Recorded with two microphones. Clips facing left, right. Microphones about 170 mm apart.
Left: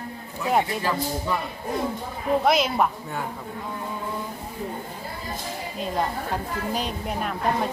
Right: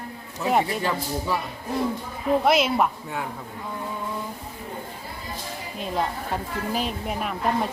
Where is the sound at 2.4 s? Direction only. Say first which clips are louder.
Even; centre (ahead or behind).